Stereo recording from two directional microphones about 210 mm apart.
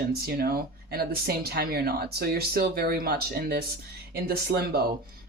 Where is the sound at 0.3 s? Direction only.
45° right (ahead or behind).